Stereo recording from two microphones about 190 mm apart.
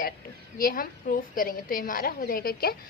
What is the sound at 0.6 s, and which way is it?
A woman's voice, 50° left (ahead or behind).